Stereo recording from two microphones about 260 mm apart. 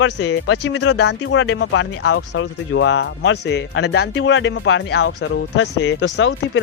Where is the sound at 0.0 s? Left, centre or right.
Left.